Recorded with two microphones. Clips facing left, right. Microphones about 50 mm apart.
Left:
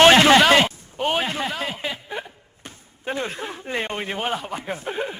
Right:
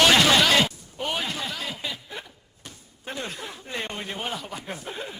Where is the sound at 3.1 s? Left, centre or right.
Left.